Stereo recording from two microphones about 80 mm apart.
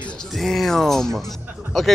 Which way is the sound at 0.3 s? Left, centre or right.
Centre.